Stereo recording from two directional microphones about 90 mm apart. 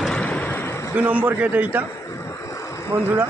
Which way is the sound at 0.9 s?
20° right (ahead or behind).